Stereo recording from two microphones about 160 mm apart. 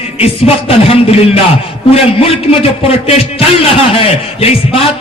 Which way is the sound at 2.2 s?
35° left (ahead or behind).